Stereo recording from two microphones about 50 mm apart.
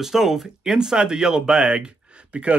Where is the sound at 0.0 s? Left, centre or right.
Centre.